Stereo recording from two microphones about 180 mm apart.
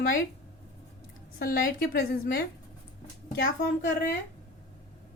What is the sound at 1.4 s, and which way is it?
A woman's voice, 55° left (ahead or behind).